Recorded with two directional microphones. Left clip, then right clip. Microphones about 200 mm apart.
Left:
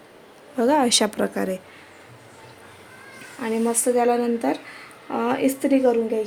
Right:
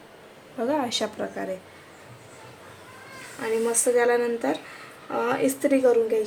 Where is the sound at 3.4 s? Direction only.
30° left (ahead or behind).